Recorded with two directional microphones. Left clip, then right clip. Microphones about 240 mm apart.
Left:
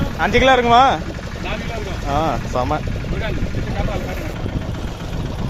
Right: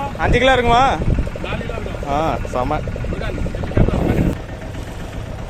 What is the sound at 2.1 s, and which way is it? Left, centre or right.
Speech, centre.